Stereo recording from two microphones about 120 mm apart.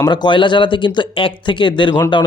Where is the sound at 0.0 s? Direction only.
35° left (ahead or behind).